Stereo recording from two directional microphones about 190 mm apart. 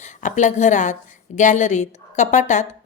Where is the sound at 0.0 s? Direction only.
40° left (ahead or behind).